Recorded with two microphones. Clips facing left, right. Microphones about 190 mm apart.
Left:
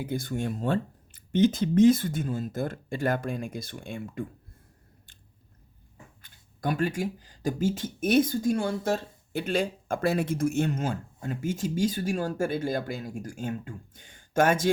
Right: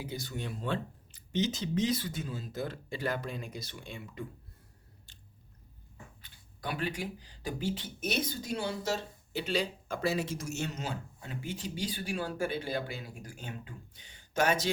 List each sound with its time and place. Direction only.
0.0 s speech: 55° left (ahead or behind)
5.1 s chewing: 55° left (ahead or behind)
6.2 s speech: 45° left (ahead or behind)